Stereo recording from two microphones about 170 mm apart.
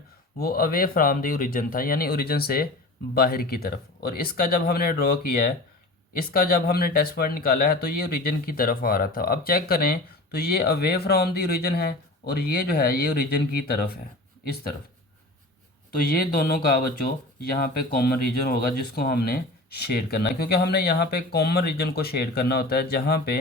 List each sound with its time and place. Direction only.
0.3 s speech: 60° left (ahead or behind)
16.0 s speech: 65° left (ahead or behind)